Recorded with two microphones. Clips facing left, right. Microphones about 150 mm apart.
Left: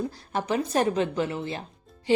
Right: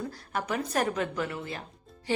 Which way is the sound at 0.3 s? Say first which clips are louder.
Left 4 dB; 25° left (ahead or behind).